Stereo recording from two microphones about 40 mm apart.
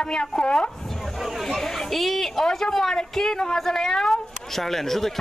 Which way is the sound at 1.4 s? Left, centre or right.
Centre.